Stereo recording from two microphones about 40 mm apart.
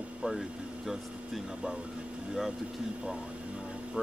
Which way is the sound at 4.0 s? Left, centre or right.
Centre.